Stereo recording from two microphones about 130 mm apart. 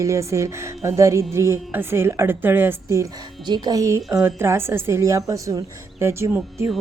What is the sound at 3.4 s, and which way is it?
Speech, 35° right (ahead or behind).